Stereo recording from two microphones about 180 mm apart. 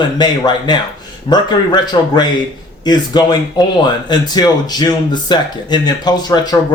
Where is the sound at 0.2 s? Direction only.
25° left (ahead or behind).